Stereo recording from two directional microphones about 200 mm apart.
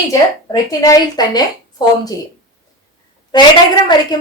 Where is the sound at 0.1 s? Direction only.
15° left (ahead or behind).